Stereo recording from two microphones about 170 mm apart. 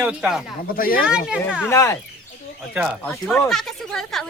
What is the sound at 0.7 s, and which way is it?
Speech, 55° left (ahead or behind).